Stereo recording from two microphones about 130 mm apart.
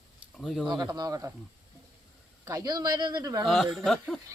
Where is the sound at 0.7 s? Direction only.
30° right (ahead or behind).